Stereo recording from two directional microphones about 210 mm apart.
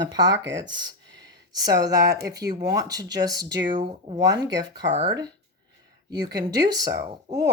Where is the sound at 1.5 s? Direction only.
20° right (ahead or behind).